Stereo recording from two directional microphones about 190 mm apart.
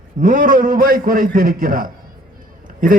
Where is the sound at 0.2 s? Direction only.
45° right (ahead or behind).